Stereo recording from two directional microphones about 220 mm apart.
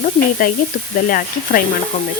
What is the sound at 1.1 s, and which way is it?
Speech, 40° left (ahead or behind).